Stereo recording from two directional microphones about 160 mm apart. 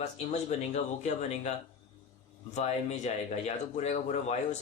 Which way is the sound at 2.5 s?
45° left (ahead or behind).